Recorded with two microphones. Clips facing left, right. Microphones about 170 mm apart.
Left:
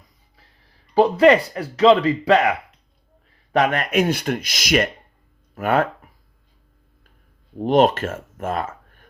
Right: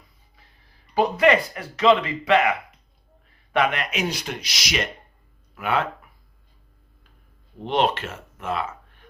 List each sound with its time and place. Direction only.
0.9 s speech: 30° left (ahead or behind)
3.5 s speech: 45° left (ahead or behind)
7.6 s speech: 45° left (ahead or behind)